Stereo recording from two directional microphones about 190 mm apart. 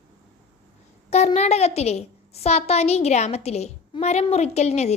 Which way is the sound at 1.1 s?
35° left (ahead or behind).